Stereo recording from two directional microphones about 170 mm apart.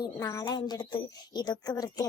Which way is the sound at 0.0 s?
20° left (ahead or behind).